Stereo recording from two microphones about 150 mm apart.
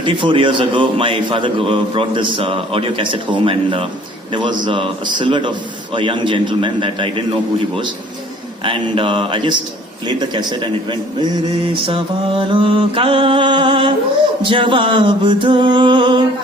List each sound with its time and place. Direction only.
0.0 s a man's voice: 35° right (ahead or behind)
8.6 s a man's voice: 35° right (ahead or behind)
11.7 s a man's voice: 35° right (ahead or behind)